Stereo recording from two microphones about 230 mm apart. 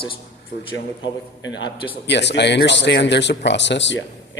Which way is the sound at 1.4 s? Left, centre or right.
Left.